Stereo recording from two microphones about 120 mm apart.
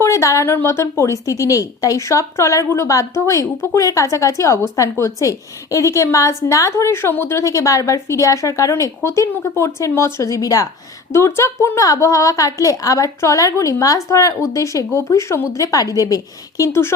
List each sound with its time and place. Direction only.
0.0 s a woman's voice: 25° left (ahead or behind)